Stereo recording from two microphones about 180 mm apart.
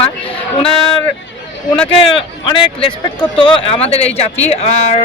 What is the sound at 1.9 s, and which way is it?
Speech, 25° left (ahead or behind).